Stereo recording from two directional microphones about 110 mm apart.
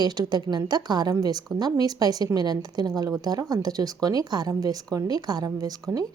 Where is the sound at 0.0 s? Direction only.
40° right (ahead or behind).